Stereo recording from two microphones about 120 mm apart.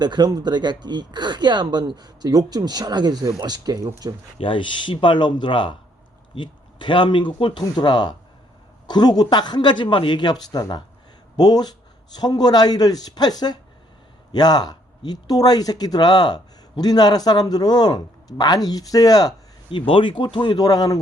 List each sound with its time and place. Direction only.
0.0 s speech: 35° right (ahead or behind)
4.4 s speech: 45° left (ahead or behind)
19.7 s speech: 45° left (ahead or behind)